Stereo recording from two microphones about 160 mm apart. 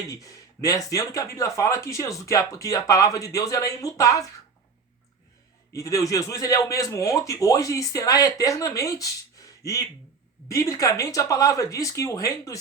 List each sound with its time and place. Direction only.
0.1 s speech: 20° left (ahead or behind)
5.7 s speech: 20° left (ahead or behind)
10.5 s speech: 20° left (ahead or behind)